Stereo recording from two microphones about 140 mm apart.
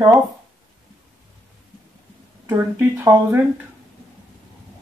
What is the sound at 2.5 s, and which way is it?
Speech, 15° right (ahead or behind).